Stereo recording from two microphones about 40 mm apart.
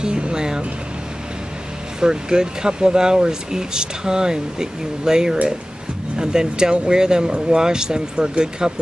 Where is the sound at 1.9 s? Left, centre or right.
Centre.